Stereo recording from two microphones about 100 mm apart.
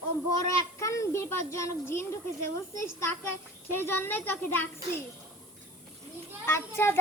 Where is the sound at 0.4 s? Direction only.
30° left (ahead or behind).